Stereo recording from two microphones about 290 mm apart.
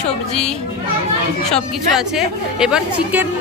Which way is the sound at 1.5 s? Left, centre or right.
Centre.